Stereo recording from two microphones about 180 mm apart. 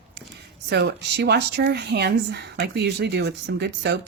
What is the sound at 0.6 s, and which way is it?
Speech, 75° right (ahead or behind).